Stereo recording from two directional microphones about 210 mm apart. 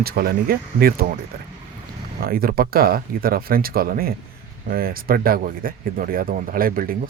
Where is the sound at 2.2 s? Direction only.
45° right (ahead or behind).